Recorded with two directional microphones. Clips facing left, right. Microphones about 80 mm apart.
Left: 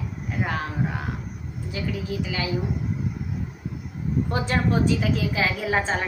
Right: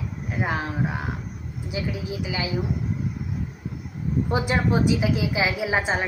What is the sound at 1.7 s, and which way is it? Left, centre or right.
Child singing, centre.